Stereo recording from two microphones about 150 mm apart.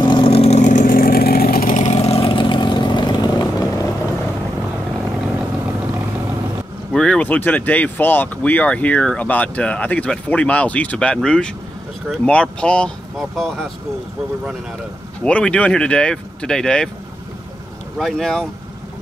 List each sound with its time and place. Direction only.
0.0 s vehicle: 35° left (ahead or behind); by 1.8 s 80° left
1.8 s vehicle: 45° left (ahead or behind); by 4.1 s 20° left (ahead or behind)
6.9 s speech: 5° left (ahead or behind)
15.2 s speech: 5° left (ahead or behind)
17.9 s speech: centre (ahead or behind)